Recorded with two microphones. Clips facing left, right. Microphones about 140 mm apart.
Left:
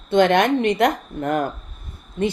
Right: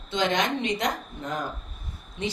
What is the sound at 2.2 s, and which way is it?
Speech, 50° left (ahead or behind).